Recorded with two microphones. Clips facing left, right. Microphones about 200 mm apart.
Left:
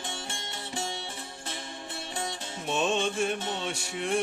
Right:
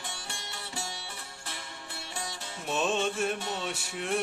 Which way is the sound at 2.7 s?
Centre (ahead or behind).